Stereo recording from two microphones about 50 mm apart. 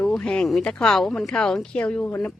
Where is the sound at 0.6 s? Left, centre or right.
Centre.